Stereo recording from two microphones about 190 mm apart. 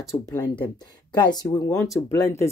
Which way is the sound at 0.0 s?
15° left (ahead or behind).